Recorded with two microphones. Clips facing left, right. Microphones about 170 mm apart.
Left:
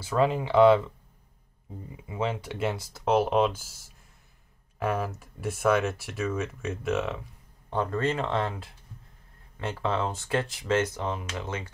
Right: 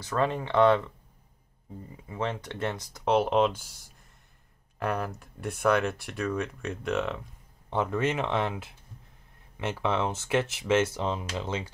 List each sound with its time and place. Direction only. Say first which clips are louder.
0.0 s speech: left 3 dB; 5° left (ahead or behind)
2.0 s speech: left 2 dB; 10° left (ahead or behind)
9.7 s speech: right 1 dB; 20° right (ahead or behind)
10.3 s speech: right 2 dB; 5° right (ahead or behind)
11.0 s speech: right 1 dB; 20° right (ahead or behind)